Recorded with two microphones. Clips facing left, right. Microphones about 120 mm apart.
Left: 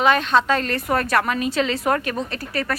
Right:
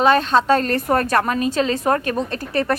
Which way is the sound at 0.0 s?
35° right (ahead or behind).